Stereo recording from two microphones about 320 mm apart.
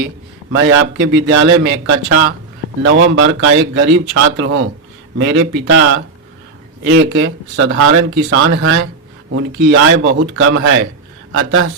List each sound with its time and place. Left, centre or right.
0.5 s speech: right